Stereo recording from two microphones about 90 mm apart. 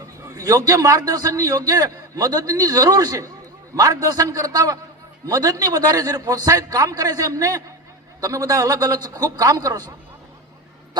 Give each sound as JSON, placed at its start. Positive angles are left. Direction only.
{"t": 0.0, "sound": "a man's voice", "side_deg": -40}